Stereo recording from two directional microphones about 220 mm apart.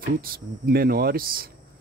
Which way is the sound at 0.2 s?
40° right (ahead or behind).